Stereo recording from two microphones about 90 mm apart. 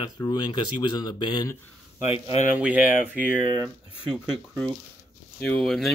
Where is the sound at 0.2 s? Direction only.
45° left (ahead or behind).